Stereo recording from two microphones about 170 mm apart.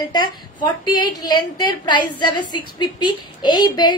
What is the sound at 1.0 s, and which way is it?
A woman's voice, 25° left (ahead or behind).